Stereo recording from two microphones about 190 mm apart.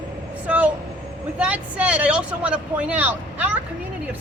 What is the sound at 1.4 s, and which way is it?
Speech, 5° right (ahead or behind).